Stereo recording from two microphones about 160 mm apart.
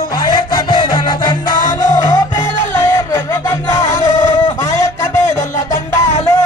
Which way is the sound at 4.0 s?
50° left (ahead or behind).